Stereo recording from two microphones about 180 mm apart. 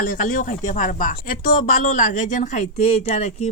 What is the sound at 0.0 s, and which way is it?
Speech, 50° left (ahead or behind).